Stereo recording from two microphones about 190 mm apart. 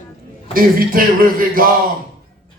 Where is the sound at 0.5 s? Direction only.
50° right (ahead or behind).